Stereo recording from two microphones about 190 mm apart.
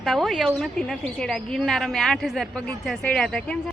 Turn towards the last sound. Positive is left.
turn(degrees=5)  # may be behind; listen again after turning